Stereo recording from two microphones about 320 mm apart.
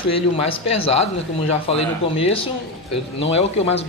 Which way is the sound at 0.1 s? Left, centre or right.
Centre.